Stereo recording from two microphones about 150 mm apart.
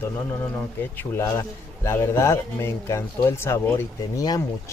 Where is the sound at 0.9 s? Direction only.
20° left (ahead or behind).